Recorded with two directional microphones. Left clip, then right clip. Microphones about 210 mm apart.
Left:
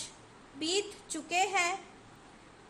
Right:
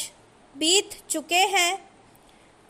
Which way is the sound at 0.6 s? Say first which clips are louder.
Right 11 dB; 40° right (ahead or behind).